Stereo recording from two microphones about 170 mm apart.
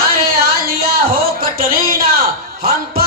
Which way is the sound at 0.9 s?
55° right (ahead or behind).